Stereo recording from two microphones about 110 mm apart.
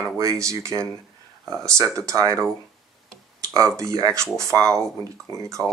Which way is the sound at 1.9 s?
30° right (ahead or behind).